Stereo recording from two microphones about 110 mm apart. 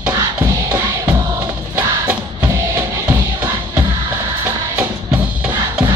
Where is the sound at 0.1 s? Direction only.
30° right (ahead or behind).